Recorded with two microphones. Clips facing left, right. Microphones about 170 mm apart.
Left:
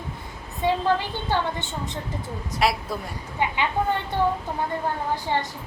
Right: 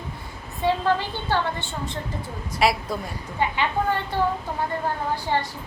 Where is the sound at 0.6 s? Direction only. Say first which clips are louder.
Even; 15° left (ahead or behind).